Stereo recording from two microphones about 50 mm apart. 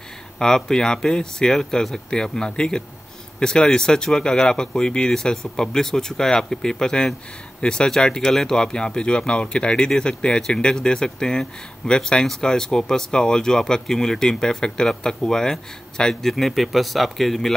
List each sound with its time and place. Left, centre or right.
0.4 s speech: centre